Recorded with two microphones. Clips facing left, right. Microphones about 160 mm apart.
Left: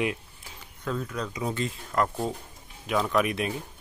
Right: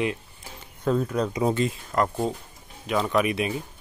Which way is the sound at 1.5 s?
15° right (ahead or behind).